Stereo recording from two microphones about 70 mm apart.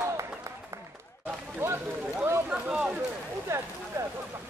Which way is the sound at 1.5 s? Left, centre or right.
Right.